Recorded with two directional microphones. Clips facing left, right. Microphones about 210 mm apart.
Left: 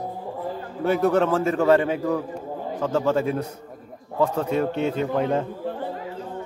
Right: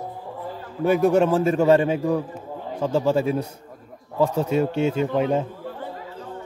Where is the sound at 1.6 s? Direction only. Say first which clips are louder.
Right 1 dB; 25° right (ahead or behind).